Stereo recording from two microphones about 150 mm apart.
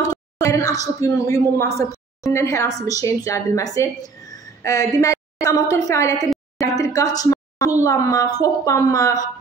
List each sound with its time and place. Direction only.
0.1 s a woman's voice: 20° left (ahead or behind)